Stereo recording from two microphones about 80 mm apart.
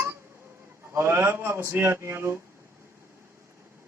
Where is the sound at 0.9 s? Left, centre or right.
Right.